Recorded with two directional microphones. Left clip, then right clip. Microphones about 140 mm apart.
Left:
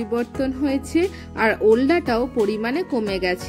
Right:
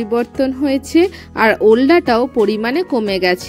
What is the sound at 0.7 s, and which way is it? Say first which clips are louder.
Speech: right 7 dB; 45° right (ahead or behind).